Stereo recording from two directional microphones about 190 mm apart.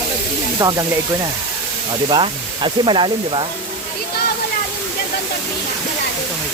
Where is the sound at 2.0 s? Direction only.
25° right (ahead or behind).